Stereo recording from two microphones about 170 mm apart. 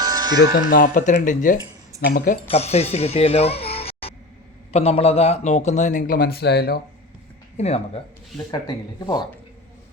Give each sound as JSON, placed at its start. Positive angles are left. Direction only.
{"t": 0.0, "sound": "music", "side_deg": -25}
{"t": 0.7, "sound": "speech", "side_deg": 55}
{"t": 2.5, "sound": "speech", "side_deg": 40}
{"t": 7.5, "sound": "speech", "side_deg": 40}
{"t": 8.4, "sound": "speech", "side_deg": 25}